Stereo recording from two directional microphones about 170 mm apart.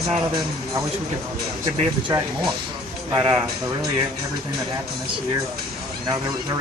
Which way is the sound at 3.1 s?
20° right (ahead or behind).